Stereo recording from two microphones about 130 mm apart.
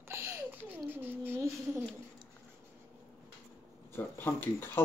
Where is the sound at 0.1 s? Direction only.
15° right (ahead or behind).